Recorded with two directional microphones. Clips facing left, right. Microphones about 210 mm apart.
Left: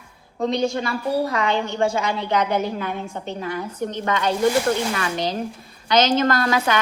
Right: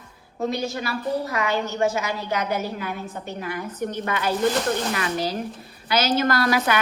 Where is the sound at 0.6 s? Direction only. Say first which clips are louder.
Left 4 dB; 30° left (ahead or behind).